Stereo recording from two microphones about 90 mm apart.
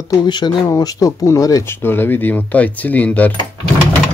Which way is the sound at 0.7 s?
40° left (ahead or behind).